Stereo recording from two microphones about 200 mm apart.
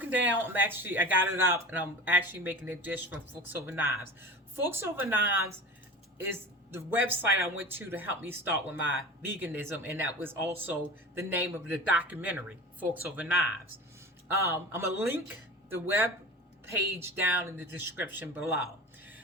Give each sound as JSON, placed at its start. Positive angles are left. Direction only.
{"t": 0.0, "sound": "speech", "side_deg": -10}